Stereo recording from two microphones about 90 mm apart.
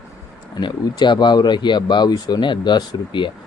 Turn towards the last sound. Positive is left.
turn(degrees=60)  # may be behind; listen again after turning